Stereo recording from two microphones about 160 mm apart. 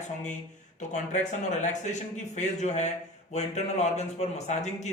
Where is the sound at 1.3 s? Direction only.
45° left (ahead or behind).